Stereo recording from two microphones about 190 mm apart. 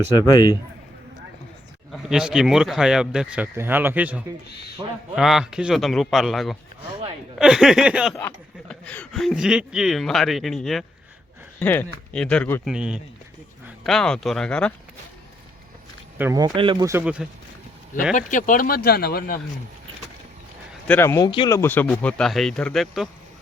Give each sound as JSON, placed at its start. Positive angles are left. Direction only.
{"t": 0.3, "sound": "a man's voice", "side_deg": 20}
{"t": 1.9, "sound": "speech", "side_deg": -5}
{"t": 4.8, "sound": "speech", "side_deg": -20}
{"t": 5.1, "sound": "speech", "side_deg": 0}
{"t": 8.7, "sound": "speech", "side_deg": 5}
{"t": 12.6, "sound": "speech", "side_deg": -5}
{"t": 16.1, "sound": "speech", "side_deg": -10}
{"t": 16.4, "sound": "speech", "side_deg": -25}
{"t": 16.9, "sound": "speech", "side_deg": -5}
{"t": 18.1, "sound": "speech", "side_deg": 40}
{"t": 20.8, "sound": "speech", "side_deg": 10}
{"t": 21.2, "sound": "speech", "side_deg": 25}